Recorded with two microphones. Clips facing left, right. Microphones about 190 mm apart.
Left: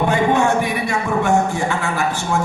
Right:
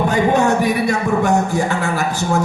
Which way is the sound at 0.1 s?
40° right (ahead or behind).